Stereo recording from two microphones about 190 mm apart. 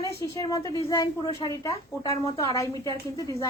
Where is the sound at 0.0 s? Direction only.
15° left (ahead or behind).